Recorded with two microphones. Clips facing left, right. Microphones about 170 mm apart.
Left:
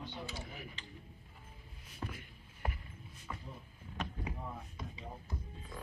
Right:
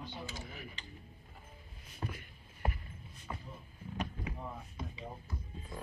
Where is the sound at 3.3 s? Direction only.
25° right (ahead or behind).